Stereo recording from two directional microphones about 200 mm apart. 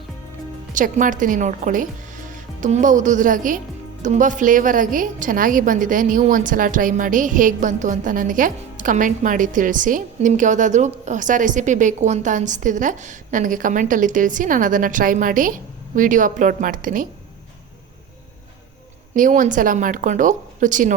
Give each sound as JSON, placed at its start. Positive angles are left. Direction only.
{"t": 0.7, "sound": "a woman's voice", "side_deg": -40}
{"t": 19.1, "sound": "a woman's voice", "side_deg": -40}